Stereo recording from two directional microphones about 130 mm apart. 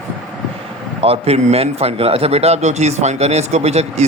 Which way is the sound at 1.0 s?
50° right (ahead or behind).